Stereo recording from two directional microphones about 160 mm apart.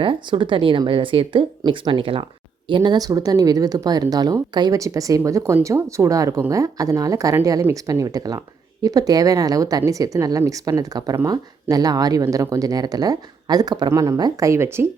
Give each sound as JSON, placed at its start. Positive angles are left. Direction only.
{"t": 0.0, "sound": "a woman's voice", "side_deg": -30}